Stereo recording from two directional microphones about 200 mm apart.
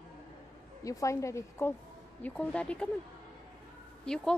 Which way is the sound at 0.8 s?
15° left (ahead or behind).